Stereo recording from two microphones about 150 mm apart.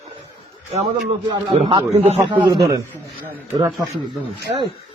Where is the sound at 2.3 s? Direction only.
30° right (ahead or behind).